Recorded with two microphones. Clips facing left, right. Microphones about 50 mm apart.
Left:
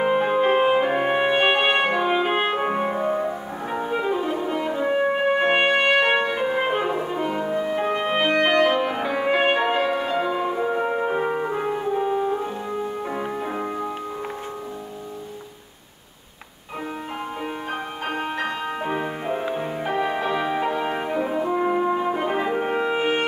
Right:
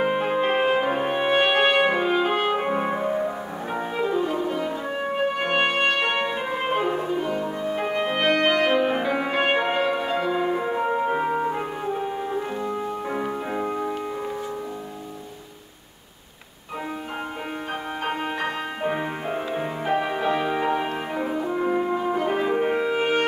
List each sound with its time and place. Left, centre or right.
0.0 s music: centre
0.4 s brass instrument: centre
1.8 s french horn: centre
2.0 s music: left
3.9 s music: left
4.5 s french horn: left
5.6 s trumpet: centre
7.2 s music: left
7.7 s music: centre
13.2 s music: centre
18.9 s music: centre
21.4 s french horn: centre
21.8 s music: centre